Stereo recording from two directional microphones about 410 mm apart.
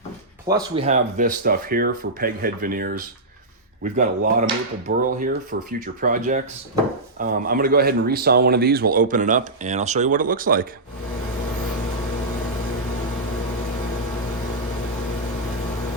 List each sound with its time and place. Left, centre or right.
0.4 s speech: centre